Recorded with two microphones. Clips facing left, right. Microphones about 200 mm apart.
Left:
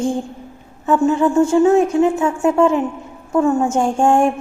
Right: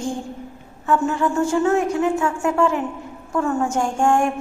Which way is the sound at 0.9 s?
20° left (ahead or behind).